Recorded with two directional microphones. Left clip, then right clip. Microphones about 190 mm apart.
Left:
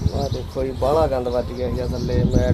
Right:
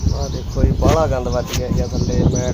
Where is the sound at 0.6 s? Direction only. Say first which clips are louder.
Right 2 dB; 5° right (ahead or behind).